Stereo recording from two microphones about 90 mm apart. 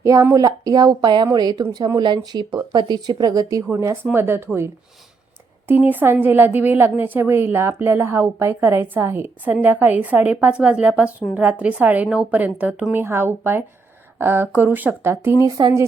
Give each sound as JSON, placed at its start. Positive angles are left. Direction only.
{"t": 0.0, "sound": "speech", "side_deg": -40}
{"t": 3.7, "sound": "a woman's voice", "side_deg": -35}
{"t": 5.6, "sound": "a woman's voice", "side_deg": -20}
{"t": 15.4, "sound": "speech", "side_deg": -50}